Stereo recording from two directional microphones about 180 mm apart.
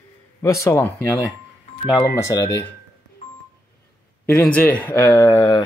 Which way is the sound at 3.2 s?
45° left (ahead or behind).